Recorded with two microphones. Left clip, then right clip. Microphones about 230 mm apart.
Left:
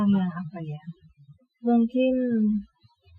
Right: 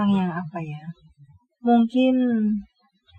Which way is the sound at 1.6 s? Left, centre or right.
Right.